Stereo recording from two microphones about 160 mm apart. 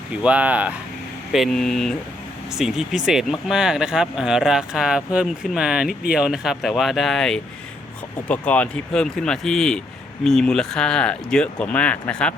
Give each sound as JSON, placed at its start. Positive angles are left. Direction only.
{"t": 0.1, "sound": "speech", "side_deg": -10}